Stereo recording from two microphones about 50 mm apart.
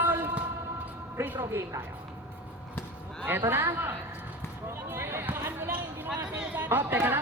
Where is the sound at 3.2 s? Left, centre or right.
Right.